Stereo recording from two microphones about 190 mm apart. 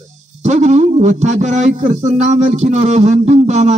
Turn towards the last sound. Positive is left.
turn(degrees=-35)  # may be behind; listen again after turning